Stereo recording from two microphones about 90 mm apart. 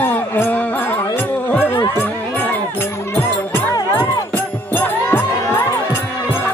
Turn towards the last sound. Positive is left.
turn(degrees=25)  # may be behind; listen again after turning